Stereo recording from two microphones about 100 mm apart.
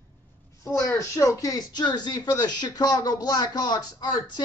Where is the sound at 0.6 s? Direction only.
35° left (ahead or behind).